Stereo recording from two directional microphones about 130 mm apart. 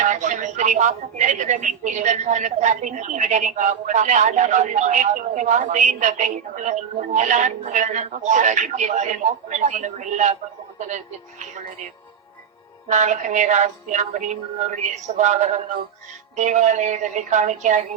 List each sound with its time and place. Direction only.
0.0 s a woman's voice: 70° right (ahead or behind)
12.9 s a woman's voice: 65° right (ahead or behind); by 17.9 s 85° right